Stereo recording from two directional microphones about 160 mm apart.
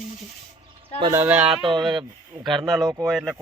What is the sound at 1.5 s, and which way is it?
Speech, 35° right (ahead or behind).